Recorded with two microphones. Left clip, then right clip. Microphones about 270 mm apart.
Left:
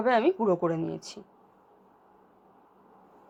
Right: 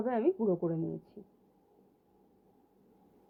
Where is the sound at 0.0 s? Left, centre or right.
Centre.